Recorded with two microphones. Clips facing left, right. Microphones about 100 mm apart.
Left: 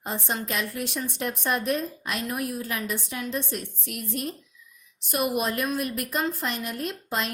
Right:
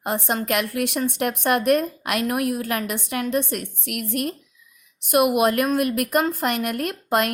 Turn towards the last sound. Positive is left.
turn(degrees=-60)  # may be behind; listen again after turning